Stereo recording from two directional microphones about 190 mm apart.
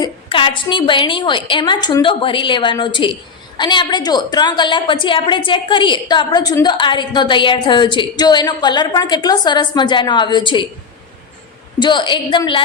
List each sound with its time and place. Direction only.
0.0 s a woman's voice: 25° left (ahead or behind)
11.8 s a woman's voice: 25° left (ahead or behind)